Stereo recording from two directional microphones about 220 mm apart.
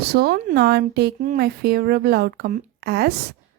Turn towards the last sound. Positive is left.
turn(degrees=-45)  # may be behind; listen again after turning